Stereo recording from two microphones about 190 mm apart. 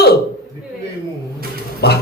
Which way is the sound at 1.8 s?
60° left (ahead or behind).